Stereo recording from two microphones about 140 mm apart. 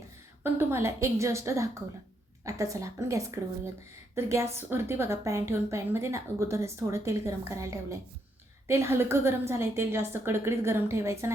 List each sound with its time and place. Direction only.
0.6 s a woman's voice: 20° right (ahead or behind)